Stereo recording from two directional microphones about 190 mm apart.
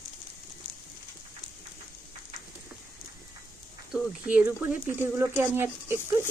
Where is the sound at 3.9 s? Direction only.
10° right (ahead or behind).